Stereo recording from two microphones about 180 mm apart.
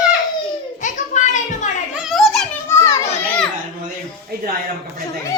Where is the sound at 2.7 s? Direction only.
15° left (ahead or behind).